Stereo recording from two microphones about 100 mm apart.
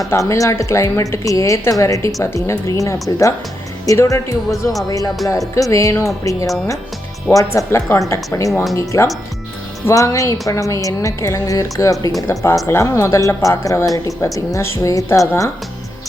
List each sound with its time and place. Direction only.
0.1 s a woman's voice: 30° left (ahead or behind)
7.5 s a woman's voice: 30° left (ahead or behind)